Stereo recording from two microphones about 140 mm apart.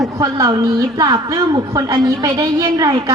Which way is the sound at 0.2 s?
25° right (ahead or behind).